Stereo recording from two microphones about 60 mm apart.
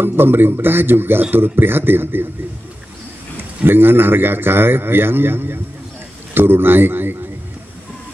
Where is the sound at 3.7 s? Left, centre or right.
Right.